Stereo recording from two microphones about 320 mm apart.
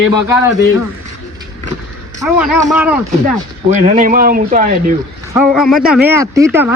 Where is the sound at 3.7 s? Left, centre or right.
Right.